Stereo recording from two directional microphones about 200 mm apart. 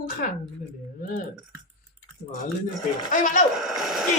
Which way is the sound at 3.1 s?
40° left (ahead or behind).